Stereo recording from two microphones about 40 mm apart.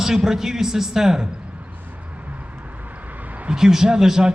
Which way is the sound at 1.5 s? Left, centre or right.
Right.